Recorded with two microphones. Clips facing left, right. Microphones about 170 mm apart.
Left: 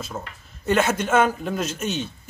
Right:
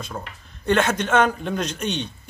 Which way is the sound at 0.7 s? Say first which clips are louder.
Even; 5° left (ahead or behind).